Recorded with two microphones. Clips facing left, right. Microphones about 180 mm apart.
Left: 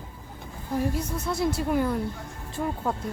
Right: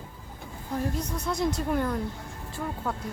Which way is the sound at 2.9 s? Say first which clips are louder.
Left 2 dB; 20° left (ahead or behind).